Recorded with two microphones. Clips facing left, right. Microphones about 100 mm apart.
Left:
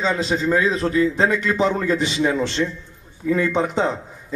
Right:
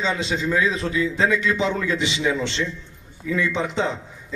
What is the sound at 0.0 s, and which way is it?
A man's voice, 40° left (ahead or behind).